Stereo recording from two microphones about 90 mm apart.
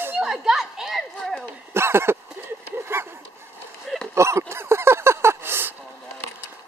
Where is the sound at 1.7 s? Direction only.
30° right (ahead or behind).